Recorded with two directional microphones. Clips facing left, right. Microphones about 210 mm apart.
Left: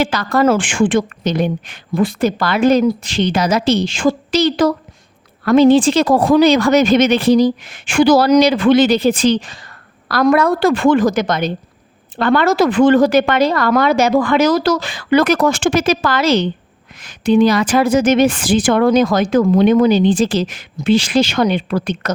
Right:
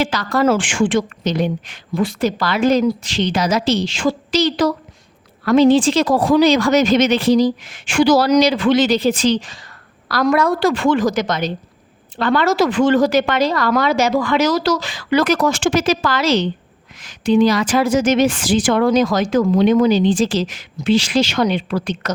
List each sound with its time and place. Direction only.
0.0 s a woman's voice: 55° left (ahead or behind)